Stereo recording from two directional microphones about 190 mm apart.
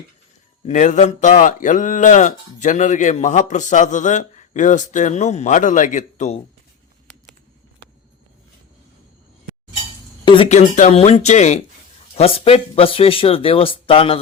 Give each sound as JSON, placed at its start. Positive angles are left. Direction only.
{"t": 0.6, "sound": "speech", "side_deg": 40}
{"t": 10.2, "sound": "speech", "side_deg": 30}